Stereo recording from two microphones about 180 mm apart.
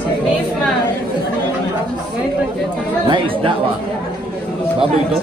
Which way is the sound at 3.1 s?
30° right (ahead or behind).